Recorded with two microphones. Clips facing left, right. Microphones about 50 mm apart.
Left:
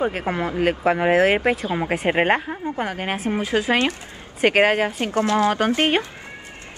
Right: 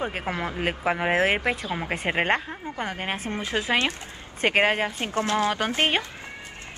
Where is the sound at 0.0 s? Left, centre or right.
Centre.